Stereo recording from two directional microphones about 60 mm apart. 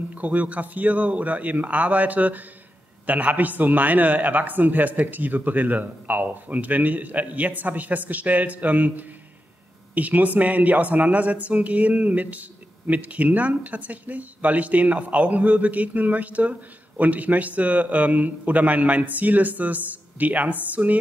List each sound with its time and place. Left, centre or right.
0.1 s speech: right